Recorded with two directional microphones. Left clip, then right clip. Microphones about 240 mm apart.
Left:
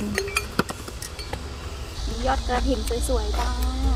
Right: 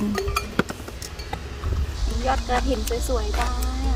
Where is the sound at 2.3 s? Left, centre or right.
Centre.